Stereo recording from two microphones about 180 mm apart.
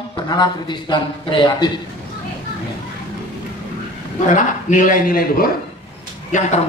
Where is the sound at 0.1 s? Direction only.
25° left (ahead or behind).